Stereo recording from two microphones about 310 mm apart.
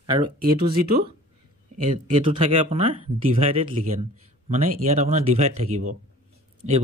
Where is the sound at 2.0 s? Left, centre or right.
Centre.